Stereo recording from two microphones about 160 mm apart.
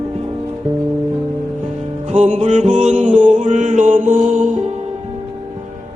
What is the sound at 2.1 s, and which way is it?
Music, 45° right (ahead or behind).